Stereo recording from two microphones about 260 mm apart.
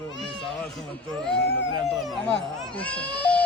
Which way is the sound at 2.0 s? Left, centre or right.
Centre.